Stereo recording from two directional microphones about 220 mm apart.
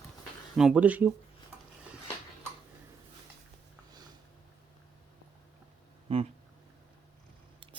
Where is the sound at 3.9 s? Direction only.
20° right (ahead or behind).